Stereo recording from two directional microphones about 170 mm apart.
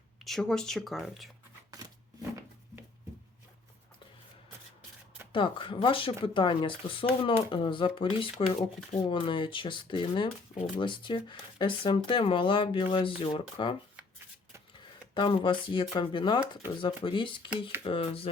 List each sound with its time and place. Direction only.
0.3 s speech: 5° left (ahead or behind)
5.3 s speech: 30° left (ahead or behind)
15.1 s speech: 30° left (ahead or behind)